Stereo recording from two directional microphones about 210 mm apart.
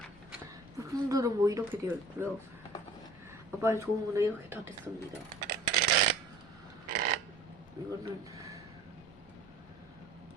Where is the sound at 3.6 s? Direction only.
15° right (ahead or behind).